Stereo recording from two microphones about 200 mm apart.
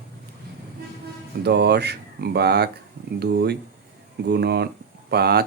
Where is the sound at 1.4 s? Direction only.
55° right (ahead or behind).